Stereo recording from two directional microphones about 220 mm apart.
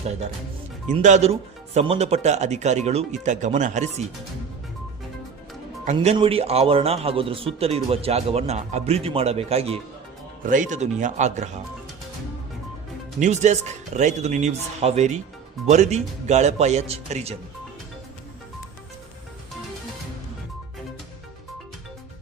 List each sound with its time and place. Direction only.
0.9 s speech: 30° right (ahead or behind)
5.8 s a man's voice: 30° right (ahead or behind)
13.1 s speech: 35° right (ahead or behind)